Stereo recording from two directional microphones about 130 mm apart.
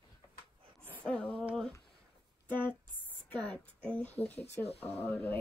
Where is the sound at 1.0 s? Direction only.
10° left (ahead or behind).